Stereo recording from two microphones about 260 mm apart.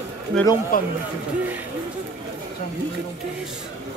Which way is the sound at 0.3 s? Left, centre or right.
Centre.